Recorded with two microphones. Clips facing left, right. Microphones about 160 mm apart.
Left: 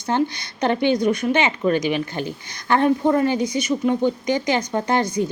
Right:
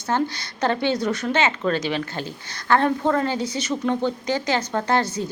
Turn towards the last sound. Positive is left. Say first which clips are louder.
# left 2 dB
turn(degrees=15)  # may be behind; listen again after turning